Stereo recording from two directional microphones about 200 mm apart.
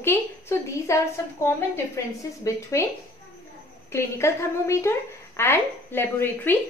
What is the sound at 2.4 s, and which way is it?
Speech, 15° left (ahead or behind).